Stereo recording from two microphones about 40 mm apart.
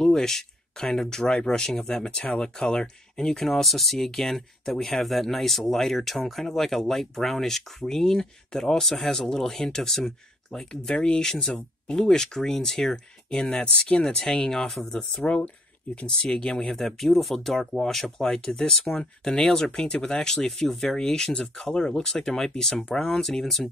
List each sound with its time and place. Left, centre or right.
0.0 s speech: centre
2.0 s speech: left
3.4 s speech: centre
10.7 s speech: left
13.4 s speech: left
14.0 s speech: centre
15.2 s speech: left
16.1 s speech: centre